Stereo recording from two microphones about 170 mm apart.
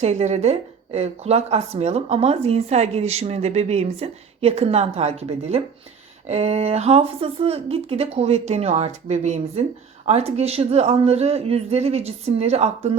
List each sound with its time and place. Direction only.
0.0 s speech: 40° right (ahead or behind)